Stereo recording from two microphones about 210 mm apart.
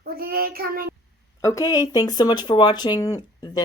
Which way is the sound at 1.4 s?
15° left (ahead or behind).